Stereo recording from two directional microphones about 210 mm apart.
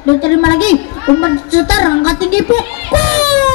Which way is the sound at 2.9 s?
5° left (ahead or behind).